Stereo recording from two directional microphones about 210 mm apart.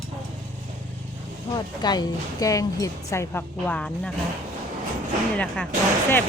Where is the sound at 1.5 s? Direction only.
20° left (ahead or behind).